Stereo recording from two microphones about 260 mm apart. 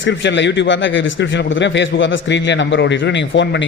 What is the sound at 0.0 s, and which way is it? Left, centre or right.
A man's voice, left.